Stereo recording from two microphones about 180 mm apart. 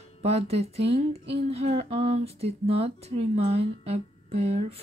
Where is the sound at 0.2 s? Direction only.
35° right (ahead or behind).